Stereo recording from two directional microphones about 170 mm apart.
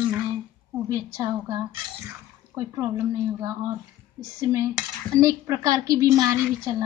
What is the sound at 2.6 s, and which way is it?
Speech, 20° right (ahead or behind).